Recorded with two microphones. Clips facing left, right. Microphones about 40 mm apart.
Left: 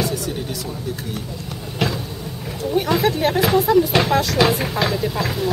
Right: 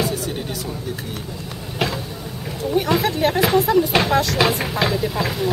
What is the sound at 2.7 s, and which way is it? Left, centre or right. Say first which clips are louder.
Speech: left 1 dB; centre.